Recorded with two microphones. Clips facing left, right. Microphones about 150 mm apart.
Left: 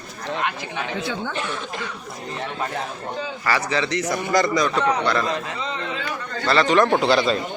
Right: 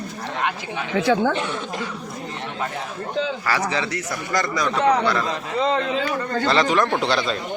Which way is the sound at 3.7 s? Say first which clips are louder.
Left 3 dB; 10° right (ahead or behind).